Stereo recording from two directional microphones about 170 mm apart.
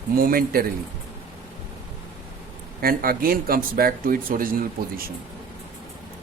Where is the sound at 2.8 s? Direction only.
60° right (ahead or behind).